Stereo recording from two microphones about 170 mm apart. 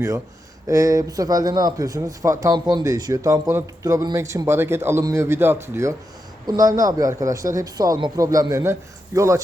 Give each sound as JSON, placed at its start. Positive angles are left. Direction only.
{"t": 0.7, "sound": "a man's voice", "side_deg": -20}